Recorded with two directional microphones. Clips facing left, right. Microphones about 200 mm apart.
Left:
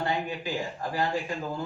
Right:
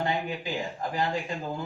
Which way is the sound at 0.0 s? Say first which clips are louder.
Even; 15° right (ahead or behind).